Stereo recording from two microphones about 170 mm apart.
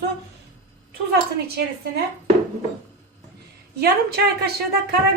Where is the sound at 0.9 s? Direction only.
70° right (ahead or behind).